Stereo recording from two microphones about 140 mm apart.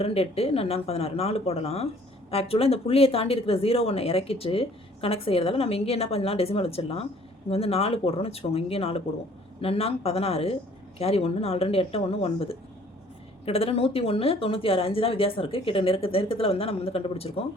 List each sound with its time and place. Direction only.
0.0 s speech: 45° left (ahead or behind)